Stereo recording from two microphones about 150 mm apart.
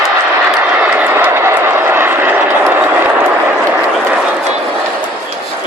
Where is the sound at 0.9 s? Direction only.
10° right (ahead or behind).